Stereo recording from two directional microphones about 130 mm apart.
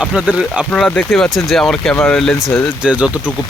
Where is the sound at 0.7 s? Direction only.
10° left (ahead or behind).